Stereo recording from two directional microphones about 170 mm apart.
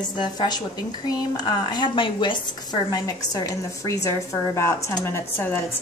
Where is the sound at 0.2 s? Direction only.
25° left (ahead or behind).